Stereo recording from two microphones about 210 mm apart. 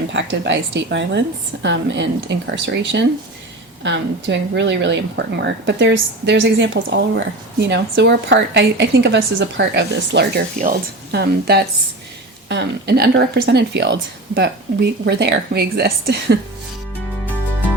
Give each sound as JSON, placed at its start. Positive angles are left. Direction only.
{"t": 0.1, "sound": "a woman's voice", "side_deg": -60}